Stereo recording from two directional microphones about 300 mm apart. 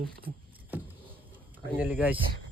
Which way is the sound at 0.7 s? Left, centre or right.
Centre.